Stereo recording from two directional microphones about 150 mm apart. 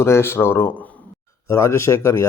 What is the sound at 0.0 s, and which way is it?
Speech, 15° left (ahead or behind).